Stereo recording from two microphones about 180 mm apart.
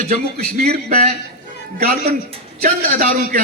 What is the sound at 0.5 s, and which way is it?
Speech, 50° right (ahead or behind).